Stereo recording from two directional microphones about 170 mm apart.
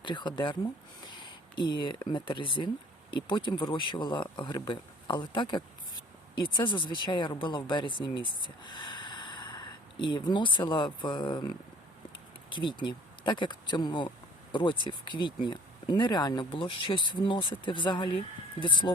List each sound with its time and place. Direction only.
0.0 s speech: 25° left (ahead or behind)
6.7 s speech: 30° left (ahead or behind)